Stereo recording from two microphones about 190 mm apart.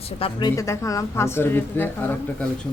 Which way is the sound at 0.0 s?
25° left (ahead or behind).